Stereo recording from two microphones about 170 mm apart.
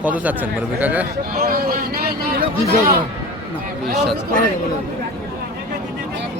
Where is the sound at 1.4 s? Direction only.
60° right (ahead or behind).